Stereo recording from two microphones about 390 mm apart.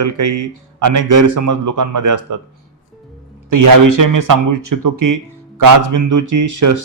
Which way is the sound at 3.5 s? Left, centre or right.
Right.